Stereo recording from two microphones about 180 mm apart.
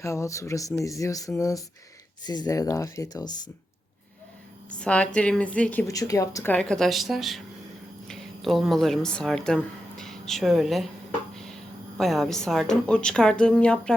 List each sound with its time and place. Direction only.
0.0 s a woman's voice: 15° left (ahead or behind)
4.8 s a woman's voice: 5° left (ahead or behind)
5.9 s a woman's voice: 20° left (ahead or behind); by 10.8 s centre (ahead or behind)
11.9 s a woman's voice: centre (ahead or behind)